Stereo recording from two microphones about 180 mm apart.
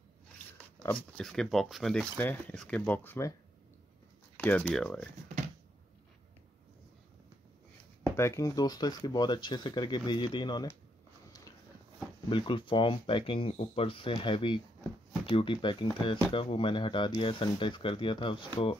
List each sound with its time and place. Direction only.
0.8 s speech: 5° left (ahead or behind)
4.4 s speech: 10° left (ahead or behind)
8.2 s speech: 15° left (ahead or behind)
12.3 s speech: 30° left (ahead or behind)